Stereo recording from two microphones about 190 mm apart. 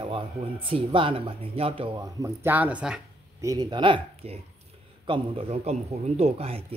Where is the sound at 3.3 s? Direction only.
20° right (ahead or behind).